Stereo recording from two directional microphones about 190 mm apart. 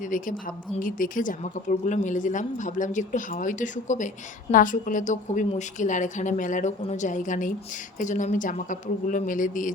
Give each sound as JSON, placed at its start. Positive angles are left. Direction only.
{"t": 0.0, "sound": "a woman's voice", "side_deg": 45}